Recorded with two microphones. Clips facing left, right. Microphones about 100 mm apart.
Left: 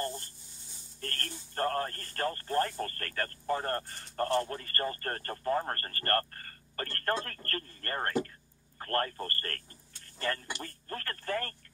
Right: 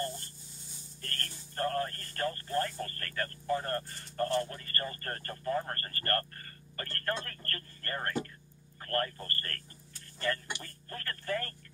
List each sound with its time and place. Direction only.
1.0 s speech: 40° left (ahead or behind)